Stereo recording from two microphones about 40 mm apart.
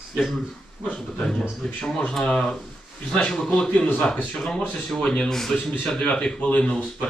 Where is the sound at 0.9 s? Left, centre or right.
Left.